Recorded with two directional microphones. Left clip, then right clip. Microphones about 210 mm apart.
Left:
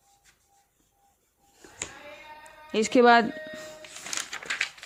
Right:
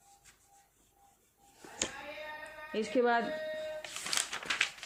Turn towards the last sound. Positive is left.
turn(degrees=5)  # may be behind; listen again after turning